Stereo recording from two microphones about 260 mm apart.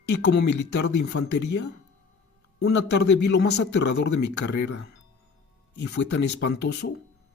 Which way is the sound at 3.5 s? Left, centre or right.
Left.